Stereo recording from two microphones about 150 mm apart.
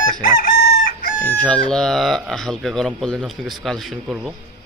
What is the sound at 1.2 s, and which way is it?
Speech, 10° left (ahead or behind).